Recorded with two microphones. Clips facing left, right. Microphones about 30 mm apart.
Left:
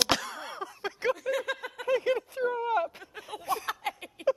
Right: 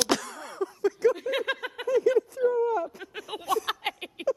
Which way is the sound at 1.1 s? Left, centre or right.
Right.